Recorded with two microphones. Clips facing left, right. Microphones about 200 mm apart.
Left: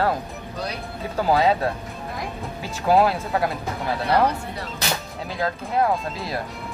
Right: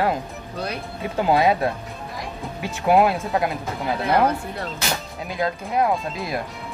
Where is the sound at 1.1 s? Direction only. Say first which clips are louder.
Right 1 dB; 15° right (ahead or behind).